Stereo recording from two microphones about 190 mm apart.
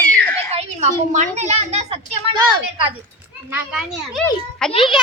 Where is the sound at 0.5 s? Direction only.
35° right (ahead or behind).